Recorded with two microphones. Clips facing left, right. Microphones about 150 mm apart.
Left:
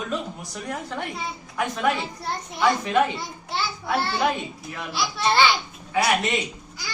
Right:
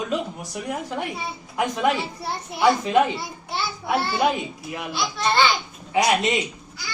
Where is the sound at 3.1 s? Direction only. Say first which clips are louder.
Even; centre (ahead or behind).